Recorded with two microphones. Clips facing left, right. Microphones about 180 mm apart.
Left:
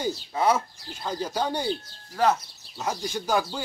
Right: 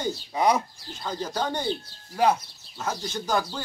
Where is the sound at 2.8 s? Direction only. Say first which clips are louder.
Left 1 dB; 10° left (ahead or behind).